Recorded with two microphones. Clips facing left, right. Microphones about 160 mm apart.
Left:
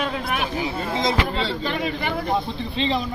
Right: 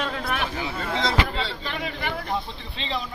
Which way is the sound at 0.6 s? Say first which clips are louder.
Left 3 dB; 20° left (ahead or behind).